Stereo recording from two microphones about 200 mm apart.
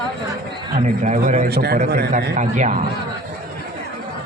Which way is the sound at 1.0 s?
35° right (ahead or behind).